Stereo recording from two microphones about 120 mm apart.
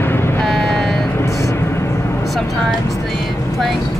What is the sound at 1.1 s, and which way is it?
Vehicle, 25° left (ahead or behind).